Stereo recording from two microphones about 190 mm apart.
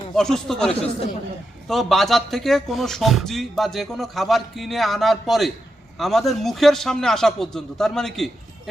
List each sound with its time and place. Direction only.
0.2 s speech: centre (ahead or behind)